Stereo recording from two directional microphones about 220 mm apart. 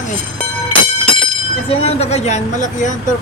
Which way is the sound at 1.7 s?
30° left (ahead or behind).